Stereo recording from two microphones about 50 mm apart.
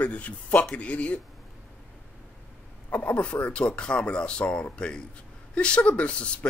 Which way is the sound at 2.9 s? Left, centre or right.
Left.